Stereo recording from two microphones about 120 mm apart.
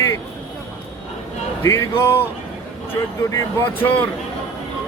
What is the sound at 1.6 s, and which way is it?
Speech, 20° left (ahead or behind).